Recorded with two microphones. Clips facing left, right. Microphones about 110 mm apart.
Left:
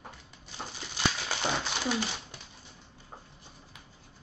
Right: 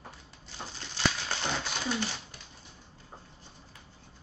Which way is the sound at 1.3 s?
10° left (ahead or behind).